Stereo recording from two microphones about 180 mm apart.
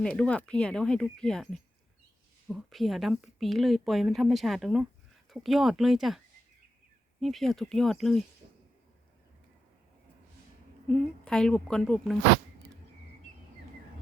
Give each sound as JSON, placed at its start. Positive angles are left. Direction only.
{"t": 0.0, "sound": "a woman's voice", "side_deg": 5}
{"t": 10.8, "sound": "a woman's voice", "side_deg": 5}